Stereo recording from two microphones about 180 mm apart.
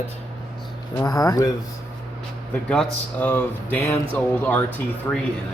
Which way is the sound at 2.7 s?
5° left (ahead or behind).